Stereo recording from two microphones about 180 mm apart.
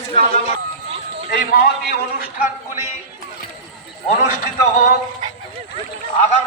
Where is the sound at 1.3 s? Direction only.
50° left (ahead or behind).